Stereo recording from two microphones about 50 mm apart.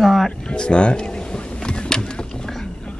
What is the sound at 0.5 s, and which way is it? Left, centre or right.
Speech, centre.